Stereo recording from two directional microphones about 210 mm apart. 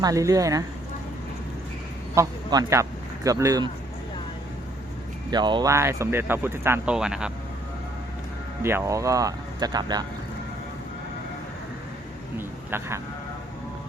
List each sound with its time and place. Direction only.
0.0 s speech: 15° right (ahead or behind)
2.1 s speech: 15° right (ahead or behind)
5.3 s speech: 20° right (ahead or behind); by 7.3 s 5° right (ahead or behind)
8.6 s speech: 15° right (ahead or behind)
12.4 s speech: 10° right (ahead or behind)